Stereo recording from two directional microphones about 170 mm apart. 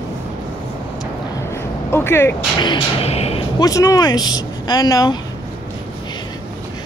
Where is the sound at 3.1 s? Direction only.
35° left (ahead or behind).